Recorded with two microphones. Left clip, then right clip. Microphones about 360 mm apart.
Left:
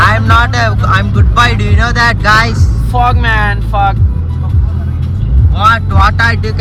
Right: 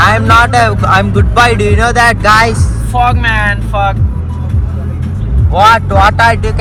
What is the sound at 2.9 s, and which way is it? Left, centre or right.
Speech, left.